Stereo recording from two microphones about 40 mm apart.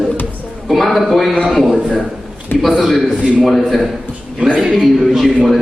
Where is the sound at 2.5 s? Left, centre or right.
Left.